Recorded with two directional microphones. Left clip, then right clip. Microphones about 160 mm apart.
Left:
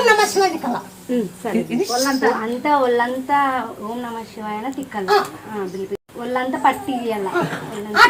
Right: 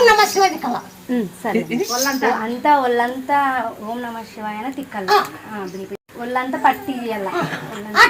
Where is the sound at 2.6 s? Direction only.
45° right (ahead or behind).